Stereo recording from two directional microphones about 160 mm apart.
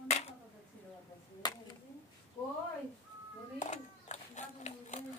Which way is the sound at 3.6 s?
45° left (ahead or behind).